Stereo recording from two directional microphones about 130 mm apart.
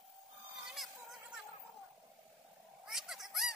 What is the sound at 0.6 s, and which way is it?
Music, centre (ahead or behind).